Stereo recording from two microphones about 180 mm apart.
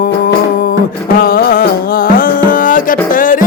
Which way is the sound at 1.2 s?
55° left (ahead or behind).